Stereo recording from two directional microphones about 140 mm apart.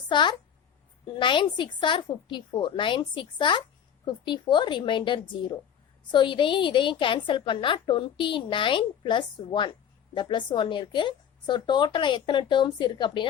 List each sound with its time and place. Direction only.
0.1 s a woman's voice: 35° left (ahead or behind)